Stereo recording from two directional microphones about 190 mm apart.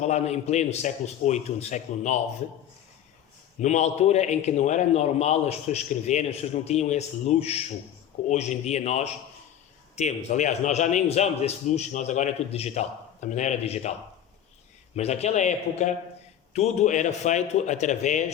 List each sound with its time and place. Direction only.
0.0 s a man's voice: 35° left (ahead or behind)
3.6 s a man's voice: 40° left (ahead or behind)
14.9 s a man's voice: 35° left (ahead or behind)